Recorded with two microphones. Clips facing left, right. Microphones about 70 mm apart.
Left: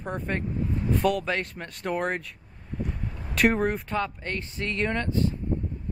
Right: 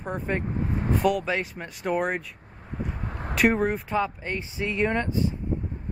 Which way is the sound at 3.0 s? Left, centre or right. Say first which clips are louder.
Right 3 dB; right.